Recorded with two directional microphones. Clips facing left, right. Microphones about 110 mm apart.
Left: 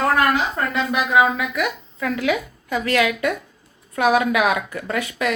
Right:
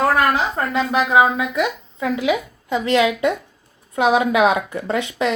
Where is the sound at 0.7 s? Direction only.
30° right (ahead or behind).